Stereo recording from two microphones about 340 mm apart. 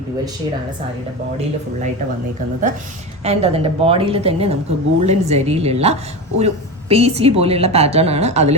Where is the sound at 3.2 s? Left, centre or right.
Centre.